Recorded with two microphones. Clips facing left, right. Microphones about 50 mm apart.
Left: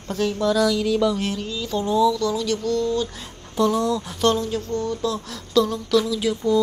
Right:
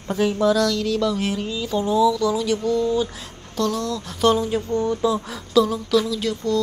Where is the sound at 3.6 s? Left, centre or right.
Centre.